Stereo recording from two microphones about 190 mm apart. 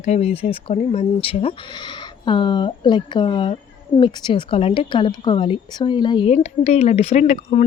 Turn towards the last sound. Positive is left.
turn(degrees=40)  # may be behind; listen again after turning